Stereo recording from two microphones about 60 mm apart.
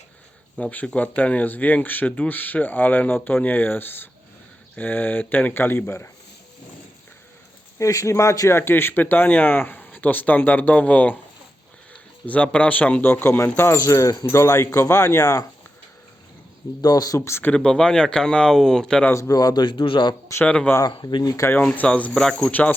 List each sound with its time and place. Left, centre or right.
0.5 s speech: left
7.8 s speech: left
12.2 s speech: left
13.8 s speech: left
14.3 s speech: left
16.9 s speech: left
17.2 s speech: left
17.5 s speech: centre
19.3 s speech: left
20.3 s speech: left
20.8 s speech: left
21.6 s speech: left
22.1 s speech: centre